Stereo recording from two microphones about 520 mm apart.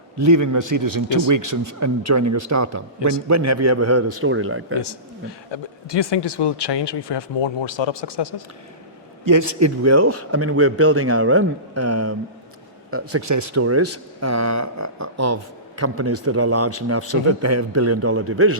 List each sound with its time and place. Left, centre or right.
0.2 s speech: right
5.5 s speech: left
9.2 s a man's voice: right